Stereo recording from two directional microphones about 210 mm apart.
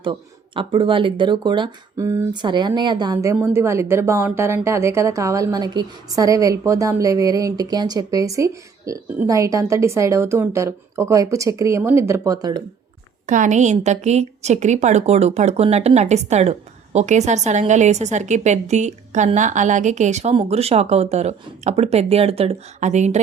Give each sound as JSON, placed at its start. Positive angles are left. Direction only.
{"t": 0.0, "sound": "speech", "side_deg": -25}
{"t": 13.2, "sound": "a woman's voice", "side_deg": -35}